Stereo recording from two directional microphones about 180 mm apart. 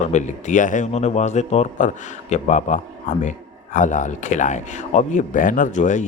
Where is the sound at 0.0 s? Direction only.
40° left (ahead or behind).